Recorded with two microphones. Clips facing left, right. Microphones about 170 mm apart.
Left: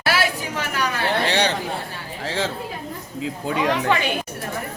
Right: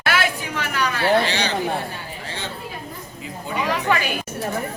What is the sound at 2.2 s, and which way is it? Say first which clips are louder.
Chatter: left 9 dB; 90° left.